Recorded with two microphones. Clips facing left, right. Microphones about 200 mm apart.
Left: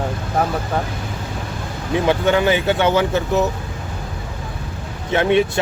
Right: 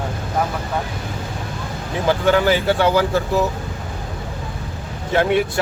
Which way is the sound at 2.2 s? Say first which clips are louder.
Right 3 dB; 20° left (ahead or behind).